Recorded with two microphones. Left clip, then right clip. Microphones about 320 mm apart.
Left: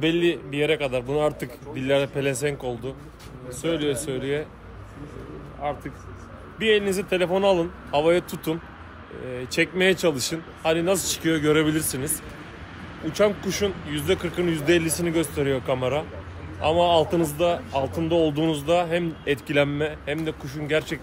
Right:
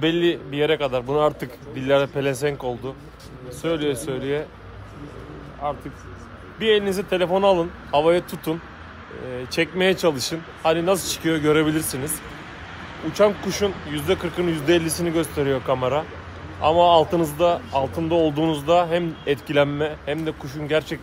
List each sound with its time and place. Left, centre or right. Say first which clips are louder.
0.0 s speech: right 2 dB; centre
5.6 s speech: right 2 dB; centre
13.1 s speech: right 3 dB; centre